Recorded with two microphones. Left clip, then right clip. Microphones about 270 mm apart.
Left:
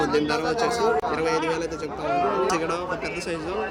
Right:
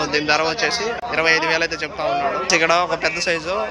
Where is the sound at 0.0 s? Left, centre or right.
Centre.